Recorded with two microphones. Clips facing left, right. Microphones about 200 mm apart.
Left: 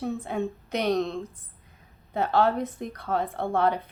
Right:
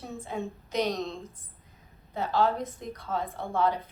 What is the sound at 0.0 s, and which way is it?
A woman's voice, 60° left (ahead or behind).